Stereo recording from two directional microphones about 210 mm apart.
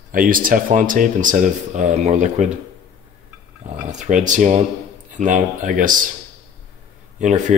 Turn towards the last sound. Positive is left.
turn(degrees=-35)  # may be behind; listen again after turning